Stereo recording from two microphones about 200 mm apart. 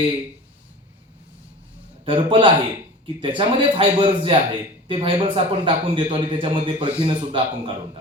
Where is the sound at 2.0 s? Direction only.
25° right (ahead or behind).